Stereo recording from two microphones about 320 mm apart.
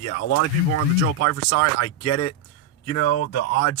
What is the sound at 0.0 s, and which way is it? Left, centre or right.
Speech, left.